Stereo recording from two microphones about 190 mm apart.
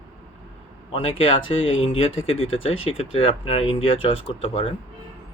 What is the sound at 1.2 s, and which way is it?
Speech, 30° left (ahead or behind).